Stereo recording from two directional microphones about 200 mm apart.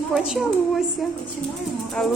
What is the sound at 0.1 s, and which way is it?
A woman's voice, 5° right (ahead or behind).